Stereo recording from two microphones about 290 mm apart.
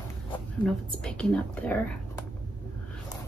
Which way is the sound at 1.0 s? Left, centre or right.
Centre.